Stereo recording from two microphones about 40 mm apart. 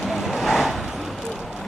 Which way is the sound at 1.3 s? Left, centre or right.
Centre.